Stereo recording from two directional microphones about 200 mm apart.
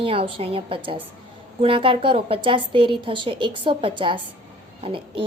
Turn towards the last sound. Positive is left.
turn(degrees=-30)  # may be behind; listen again after turning